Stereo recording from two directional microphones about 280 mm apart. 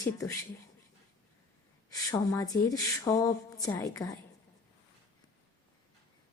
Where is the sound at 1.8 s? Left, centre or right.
Centre.